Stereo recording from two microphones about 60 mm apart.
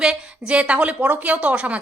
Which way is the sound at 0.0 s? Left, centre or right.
Centre.